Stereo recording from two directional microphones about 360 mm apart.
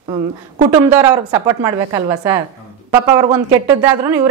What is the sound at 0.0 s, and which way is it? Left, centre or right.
Speech, centre.